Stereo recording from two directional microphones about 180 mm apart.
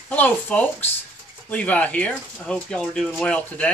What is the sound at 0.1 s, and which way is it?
Speech, 10° left (ahead or behind).